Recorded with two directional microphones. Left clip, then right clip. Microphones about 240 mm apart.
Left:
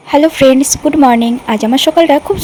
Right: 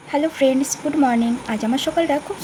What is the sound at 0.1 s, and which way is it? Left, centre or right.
Speech, left.